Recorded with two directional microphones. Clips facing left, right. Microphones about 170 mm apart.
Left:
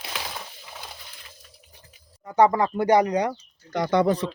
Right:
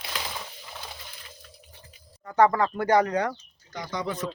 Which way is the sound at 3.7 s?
65° left (ahead or behind).